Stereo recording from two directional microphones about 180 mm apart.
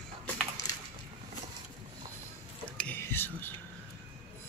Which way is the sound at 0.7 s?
20° left (ahead or behind).